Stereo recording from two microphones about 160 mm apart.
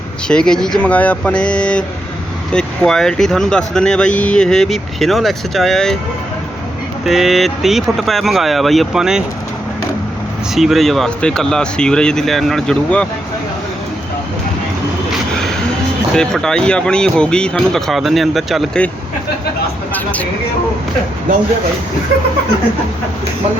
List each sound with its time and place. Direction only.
0.3 s speech: 5° left (ahead or behind)
7.0 s speech: centre (ahead or behind)
10.5 s speech: centre (ahead or behind)
16.1 s speech: 5° left (ahead or behind)